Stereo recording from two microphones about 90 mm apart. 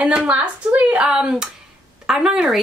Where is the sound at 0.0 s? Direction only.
15° right (ahead or behind).